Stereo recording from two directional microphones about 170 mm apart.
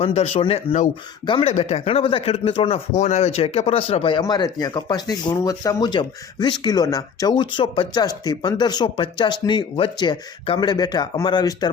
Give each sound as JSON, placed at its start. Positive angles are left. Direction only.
{"t": 0.0, "sound": "speech", "side_deg": 35}